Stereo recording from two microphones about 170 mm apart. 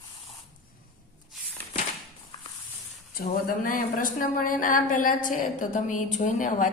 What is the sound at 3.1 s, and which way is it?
A woman's voice, 55° left (ahead or behind).